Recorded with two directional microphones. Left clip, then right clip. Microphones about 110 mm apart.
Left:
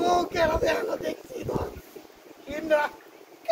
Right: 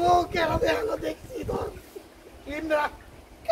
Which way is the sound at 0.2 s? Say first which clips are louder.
Left 1 dB; 45° left (ahead or behind).